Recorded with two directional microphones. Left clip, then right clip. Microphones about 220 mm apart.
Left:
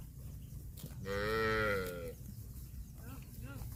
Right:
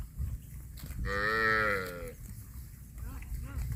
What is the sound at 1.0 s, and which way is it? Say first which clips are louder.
Cattle: right 6 dB; 25° left (ahead or behind).